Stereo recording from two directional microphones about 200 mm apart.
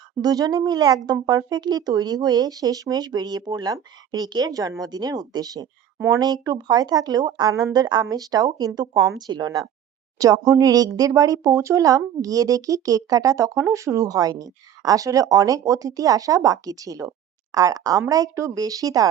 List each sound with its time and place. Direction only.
0.2 s speech: 20° right (ahead or behind)